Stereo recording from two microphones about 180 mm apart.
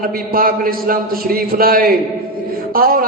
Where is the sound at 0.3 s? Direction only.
55° right (ahead or behind).